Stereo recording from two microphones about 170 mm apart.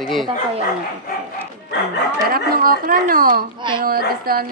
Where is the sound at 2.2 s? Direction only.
60° right (ahead or behind).